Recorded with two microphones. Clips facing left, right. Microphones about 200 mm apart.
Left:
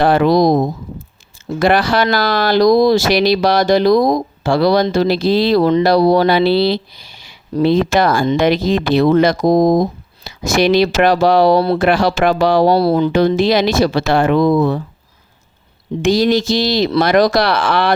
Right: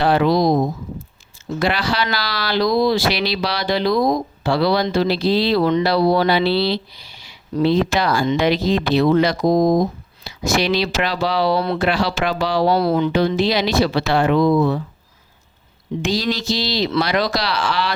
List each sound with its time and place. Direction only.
0.0 s speech: 50° left (ahead or behind)
1.5 s speech: 50° left (ahead or behind)
11.8 s speech: 50° left (ahead or behind)
16.0 s speech: 50° left (ahead or behind)